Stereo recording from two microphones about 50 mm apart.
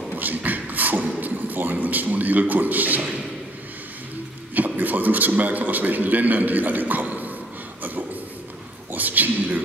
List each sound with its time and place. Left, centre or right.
0.1 s beatboxing: right
1.2 s a man's voice: right
4.6 s a man's voice: right
8.9 s a sound: right